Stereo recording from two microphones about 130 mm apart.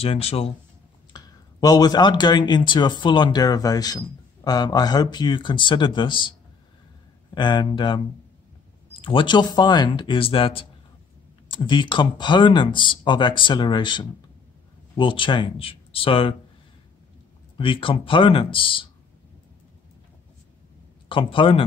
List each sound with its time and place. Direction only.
0.0 s speech: 50° left (ahead or behind)
1.1 s speech: 30° left (ahead or behind)
7.3 s speech: 35° left (ahead or behind)
9.0 s speech: 40° left (ahead or behind)
17.6 s speech: 40° left (ahead or behind)
21.1 s speech: 40° left (ahead or behind)